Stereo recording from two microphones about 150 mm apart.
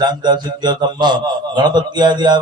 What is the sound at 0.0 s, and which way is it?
A man's voice, 30° right (ahead or behind).